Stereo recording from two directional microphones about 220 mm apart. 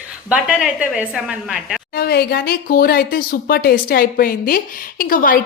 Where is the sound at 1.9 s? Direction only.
45° left (ahead or behind).